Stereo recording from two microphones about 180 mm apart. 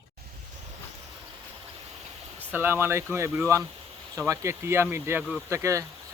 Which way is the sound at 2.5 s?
10° right (ahead or behind).